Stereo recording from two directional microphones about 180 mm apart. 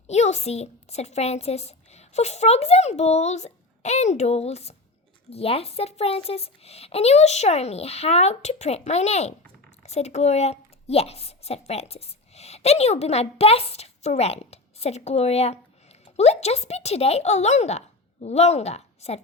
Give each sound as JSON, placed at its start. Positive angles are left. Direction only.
{"t": 0.1, "sound": "a woman's voice", "side_deg": 40}